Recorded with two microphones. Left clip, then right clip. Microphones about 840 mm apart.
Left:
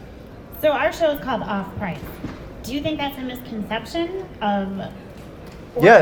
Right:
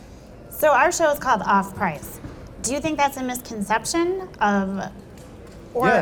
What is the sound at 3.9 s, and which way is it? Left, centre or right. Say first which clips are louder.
Speech: right 3 dB; right.